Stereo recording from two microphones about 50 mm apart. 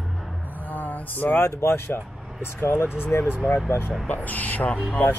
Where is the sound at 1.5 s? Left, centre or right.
Left.